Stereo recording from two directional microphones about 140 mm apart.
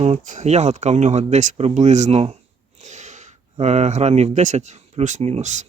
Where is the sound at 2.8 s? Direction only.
60° right (ahead or behind).